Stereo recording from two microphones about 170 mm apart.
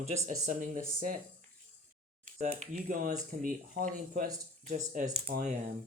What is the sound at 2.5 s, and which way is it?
Speech, 45° right (ahead or behind).